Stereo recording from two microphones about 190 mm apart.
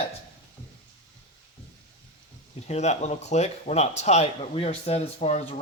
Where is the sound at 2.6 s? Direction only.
35° left (ahead or behind).